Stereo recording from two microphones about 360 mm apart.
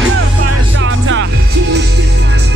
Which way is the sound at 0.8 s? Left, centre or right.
Right.